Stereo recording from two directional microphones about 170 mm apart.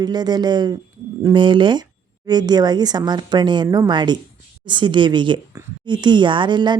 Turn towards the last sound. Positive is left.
turn(degrees=-25)  # may be behind; listen again after turning